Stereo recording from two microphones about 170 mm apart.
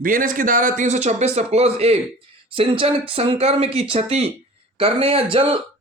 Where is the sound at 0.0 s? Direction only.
55° right (ahead or behind).